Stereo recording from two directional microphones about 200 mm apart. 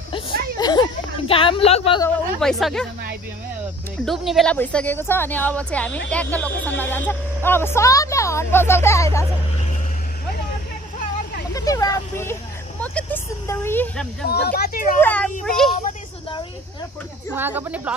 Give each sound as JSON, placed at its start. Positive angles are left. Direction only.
{"t": 0.1, "sound": "speech", "side_deg": 20}
{"t": 2.4, "sound": "speech", "side_deg": 0}
{"t": 4.0, "sound": "a woman's voice", "side_deg": 0}
{"t": 11.5, "sound": "vehicle", "side_deg": 20}
{"t": 12.8, "sound": "speech", "side_deg": 10}
{"t": 14.3, "sound": "speech", "side_deg": 50}
{"t": 15.0, "sound": "a woman's voice", "side_deg": 10}
{"t": 17.4, "sound": "speech", "side_deg": -10}